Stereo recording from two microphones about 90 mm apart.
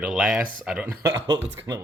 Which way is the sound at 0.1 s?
5° right (ahead or behind).